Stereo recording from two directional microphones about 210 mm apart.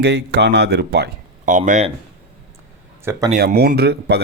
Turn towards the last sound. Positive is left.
turn(degrees=-50)  # may be behind; listen again after turning